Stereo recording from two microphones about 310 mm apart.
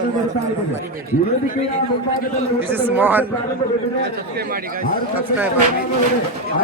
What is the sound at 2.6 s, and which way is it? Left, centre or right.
Speech, centre.